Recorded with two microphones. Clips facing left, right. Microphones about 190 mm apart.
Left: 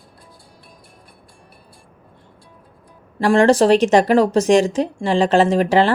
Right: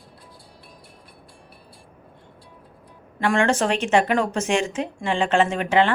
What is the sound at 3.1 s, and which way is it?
Speech, 35° left (ahead or behind).